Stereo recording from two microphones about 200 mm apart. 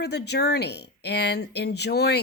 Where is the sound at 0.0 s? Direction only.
55° left (ahead or behind).